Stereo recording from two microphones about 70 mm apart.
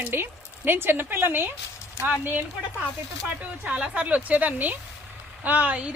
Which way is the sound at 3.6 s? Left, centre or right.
Centre.